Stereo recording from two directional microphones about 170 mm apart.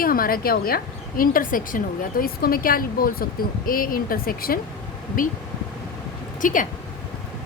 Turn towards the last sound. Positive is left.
turn(degrees=50)  # may be behind; listen again after turning